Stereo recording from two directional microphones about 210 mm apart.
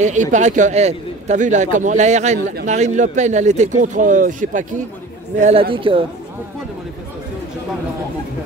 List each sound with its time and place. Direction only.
0.0 s a man's voice: 35° right (ahead or behind)
5.4 s speech: 25° right (ahead or behind)